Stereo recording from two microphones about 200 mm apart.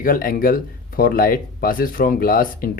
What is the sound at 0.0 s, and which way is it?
Speech, 45° left (ahead or behind).